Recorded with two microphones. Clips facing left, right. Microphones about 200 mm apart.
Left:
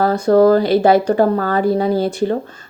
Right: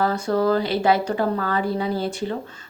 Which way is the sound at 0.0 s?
40° left (ahead or behind).